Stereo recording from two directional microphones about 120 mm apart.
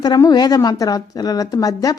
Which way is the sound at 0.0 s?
35° left (ahead or behind).